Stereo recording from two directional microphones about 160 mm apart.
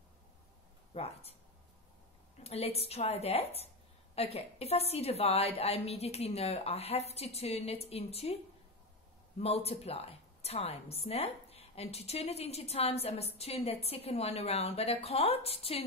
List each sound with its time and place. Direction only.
0.9 s a woman's voice: 40° left (ahead or behind)
2.4 s a woman's voice: 40° left (ahead or behind)
9.4 s a woman's voice: 40° left (ahead or behind)